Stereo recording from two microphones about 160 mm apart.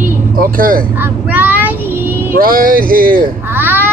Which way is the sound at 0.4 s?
60° right (ahead or behind).